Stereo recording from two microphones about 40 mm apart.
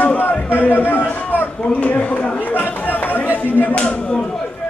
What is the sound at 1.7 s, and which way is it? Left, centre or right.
Speech, left.